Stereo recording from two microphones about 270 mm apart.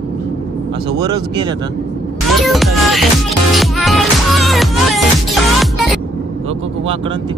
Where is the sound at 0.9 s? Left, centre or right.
Centre.